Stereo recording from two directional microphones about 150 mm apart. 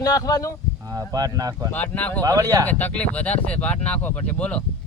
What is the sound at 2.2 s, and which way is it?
Speech, 25° right (ahead or behind).